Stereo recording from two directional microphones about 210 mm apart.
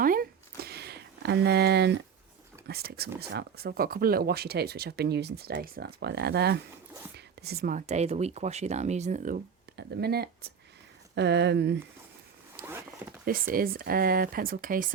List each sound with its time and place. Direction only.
0.0 s a sound: 45° right (ahead or behind)
2.6 s speech: 50° right (ahead or behind)
13.5 s speech: 45° right (ahead or behind)